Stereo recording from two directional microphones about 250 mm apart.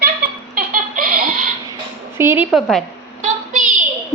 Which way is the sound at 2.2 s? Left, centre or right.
Centre.